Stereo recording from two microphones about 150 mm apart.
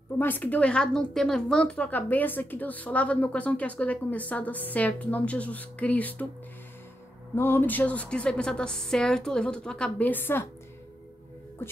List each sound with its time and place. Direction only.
0.2 s a woman's voice: 10° left (ahead or behind)
7.3 s a woman's voice: 15° left (ahead or behind)
11.6 s speech: 15° left (ahead or behind)